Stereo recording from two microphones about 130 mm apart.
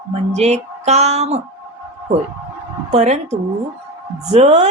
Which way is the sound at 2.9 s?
60° right (ahead or behind).